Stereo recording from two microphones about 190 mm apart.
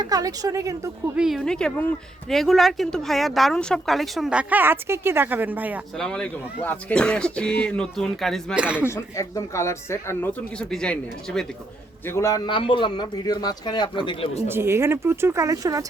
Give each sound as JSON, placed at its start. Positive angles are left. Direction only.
{"t": 0.0, "sound": "a woman's voice", "side_deg": -20}
{"t": 1.1, "sound": "speech", "side_deg": 0}
{"t": 6.0, "sound": "speech", "side_deg": 5}
{"t": 8.8, "sound": "speech", "side_deg": 15}
{"t": 12.0, "sound": "a man's voice", "side_deg": 15}
{"t": 14.4, "sound": "speech", "side_deg": -10}